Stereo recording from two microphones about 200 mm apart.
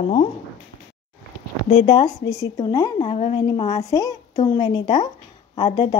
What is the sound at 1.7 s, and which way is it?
Speech, 25° left (ahead or behind).